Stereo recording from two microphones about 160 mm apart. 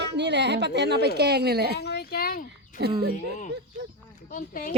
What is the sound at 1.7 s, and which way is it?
Speech, 90° left.